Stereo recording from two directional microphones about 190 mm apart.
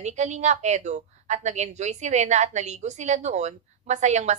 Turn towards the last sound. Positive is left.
turn(degrees=-35)  # may be behind; listen again after turning